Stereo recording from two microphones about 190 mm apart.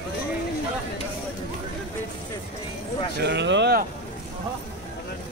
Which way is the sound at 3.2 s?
65° right (ahead or behind).